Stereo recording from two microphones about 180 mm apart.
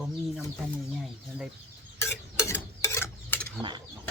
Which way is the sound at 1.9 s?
15° left (ahead or behind).